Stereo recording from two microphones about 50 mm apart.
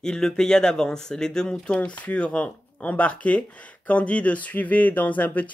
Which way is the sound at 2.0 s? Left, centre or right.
Left.